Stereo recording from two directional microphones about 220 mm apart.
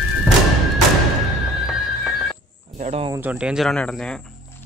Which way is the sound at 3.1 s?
10° right (ahead or behind).